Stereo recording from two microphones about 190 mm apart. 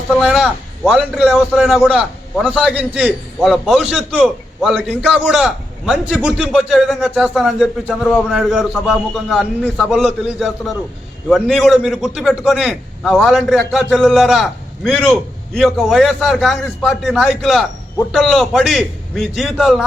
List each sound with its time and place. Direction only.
0.1 s a man's voice: centre (ahead or behind)